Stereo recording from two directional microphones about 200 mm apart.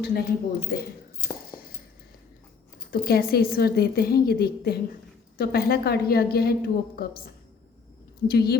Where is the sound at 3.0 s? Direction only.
50° left (ahead or behind).